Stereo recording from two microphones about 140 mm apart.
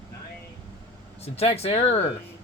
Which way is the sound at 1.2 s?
45° left (ahead or behind).